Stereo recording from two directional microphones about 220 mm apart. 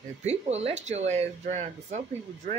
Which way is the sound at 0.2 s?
30° right (ahead or behind).